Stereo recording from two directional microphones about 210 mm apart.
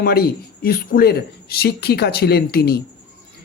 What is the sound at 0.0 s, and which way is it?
Speech, 45° left (ahead or behind).